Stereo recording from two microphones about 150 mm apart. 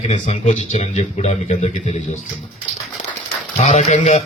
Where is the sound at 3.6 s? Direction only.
50° left (ahead or behind).